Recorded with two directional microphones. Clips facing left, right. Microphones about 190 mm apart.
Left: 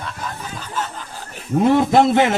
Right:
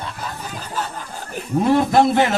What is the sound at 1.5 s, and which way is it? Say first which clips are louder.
Speech: left 1 dB; 20° left (ahead or behind).